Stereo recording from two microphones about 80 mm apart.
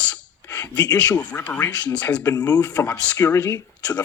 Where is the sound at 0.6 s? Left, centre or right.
Left.